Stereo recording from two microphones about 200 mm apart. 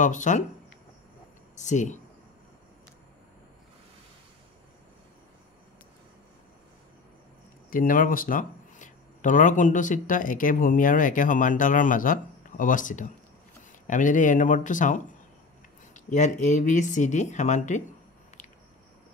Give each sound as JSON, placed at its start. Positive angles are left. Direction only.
{"t": 0.0, "sound": "speech", "side_deg": 40}
{"t": 1.5, "sound": "speech", "side_deg": 35}
{"t": 7.7, "sound": "speech", "side_deg": 40}